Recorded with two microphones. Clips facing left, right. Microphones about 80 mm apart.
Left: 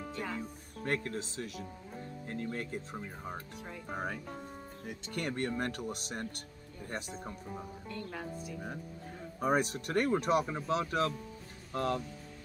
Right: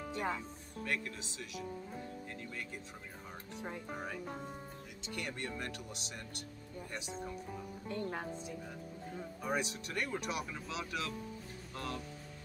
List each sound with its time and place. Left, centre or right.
0.8 s speech: left
7.9 s speech: right
9.4 s speech: left